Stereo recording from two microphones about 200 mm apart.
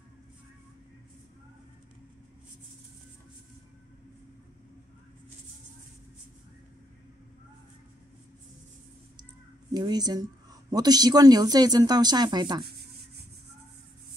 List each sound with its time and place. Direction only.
9.8 s speech: 20° right (ahead or behind)